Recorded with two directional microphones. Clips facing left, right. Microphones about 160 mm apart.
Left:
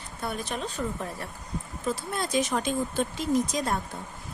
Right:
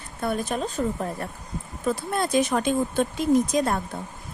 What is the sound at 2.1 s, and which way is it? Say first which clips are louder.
Speech: right 5 dB; 55° right (ahead or behind).